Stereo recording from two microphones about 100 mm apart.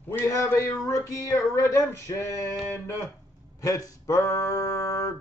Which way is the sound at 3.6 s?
35° left (ahead or behind).